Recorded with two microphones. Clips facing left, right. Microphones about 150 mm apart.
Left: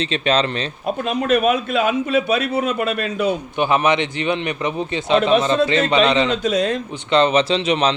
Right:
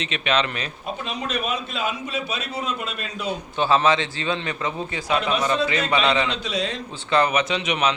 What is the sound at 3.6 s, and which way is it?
A man's voice, 15° left (ahead or behind).